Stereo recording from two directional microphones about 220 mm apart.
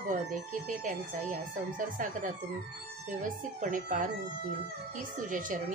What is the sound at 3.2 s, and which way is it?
Speech, 35° right (ahead or behind).